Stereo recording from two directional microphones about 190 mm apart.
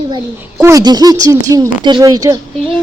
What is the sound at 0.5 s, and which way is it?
A woman's voice, 15° right (ahead or behind).